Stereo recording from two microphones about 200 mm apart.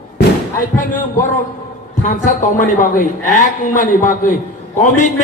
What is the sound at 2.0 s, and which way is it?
Speech, 40° left (ahead or behind).